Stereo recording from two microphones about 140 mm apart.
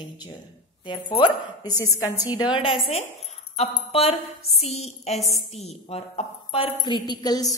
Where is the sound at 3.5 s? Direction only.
45° left (ahead or behind).